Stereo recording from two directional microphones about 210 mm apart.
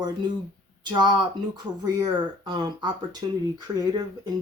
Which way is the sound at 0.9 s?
20° right (ahead or behind).